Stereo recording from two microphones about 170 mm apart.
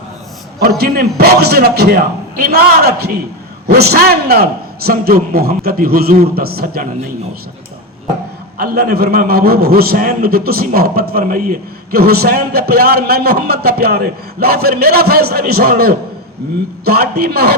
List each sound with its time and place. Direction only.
0.8 s a man's voice: 65° right (ahead or behind)
8.5 s a man's voice: 60° right (ahead or behind)
11.9 s a man's voice: 65° right (ahead or behind)